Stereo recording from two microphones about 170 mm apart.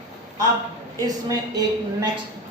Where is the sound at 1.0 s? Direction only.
20° right (ahead or behind).